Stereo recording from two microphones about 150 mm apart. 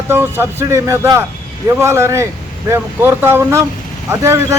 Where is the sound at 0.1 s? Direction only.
15° right (ahead or behind).